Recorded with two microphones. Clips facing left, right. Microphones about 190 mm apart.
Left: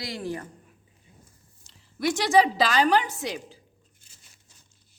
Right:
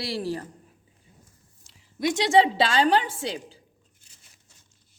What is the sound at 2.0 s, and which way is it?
A woman's voice, 20° right (ahead or behind).